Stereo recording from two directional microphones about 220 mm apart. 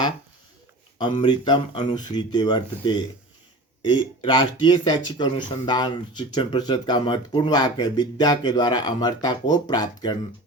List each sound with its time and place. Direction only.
0.9 s speech: 20° left (ahead or behind)